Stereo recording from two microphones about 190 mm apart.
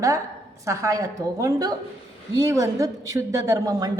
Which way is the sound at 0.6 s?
15° right (ahead or behind).